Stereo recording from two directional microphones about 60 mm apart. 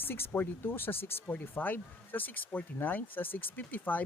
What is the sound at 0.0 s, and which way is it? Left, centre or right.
Speech, left.